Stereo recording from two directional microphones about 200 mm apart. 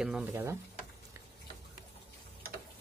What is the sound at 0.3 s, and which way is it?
Speech, 15° right (ahead or behind).